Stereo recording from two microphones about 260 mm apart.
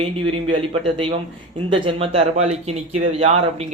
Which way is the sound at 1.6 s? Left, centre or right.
Centre.